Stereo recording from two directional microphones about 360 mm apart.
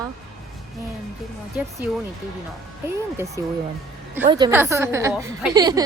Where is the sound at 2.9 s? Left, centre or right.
Centre.